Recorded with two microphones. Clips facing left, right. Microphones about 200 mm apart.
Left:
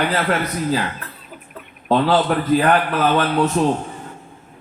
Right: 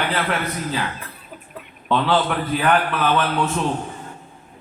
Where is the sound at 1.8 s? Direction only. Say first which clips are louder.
Left 3 dB; 40° left (ahead or behind).